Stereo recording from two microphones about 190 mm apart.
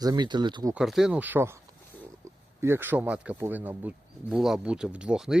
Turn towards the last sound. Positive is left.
turn(degrees=-5)  # may be behind; listen again after turning